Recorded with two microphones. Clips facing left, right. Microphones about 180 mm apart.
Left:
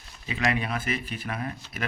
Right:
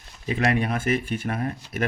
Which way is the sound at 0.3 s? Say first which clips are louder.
Right 5 dB; 50° right (ahead or behind).